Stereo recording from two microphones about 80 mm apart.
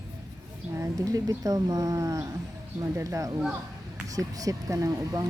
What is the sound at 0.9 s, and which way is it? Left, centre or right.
Speech, right.